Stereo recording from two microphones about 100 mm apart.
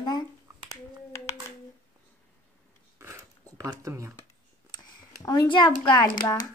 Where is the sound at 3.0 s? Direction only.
25° right (ahead or behind).